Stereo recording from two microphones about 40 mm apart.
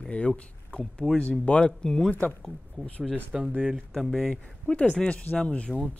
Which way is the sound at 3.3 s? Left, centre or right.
Centre.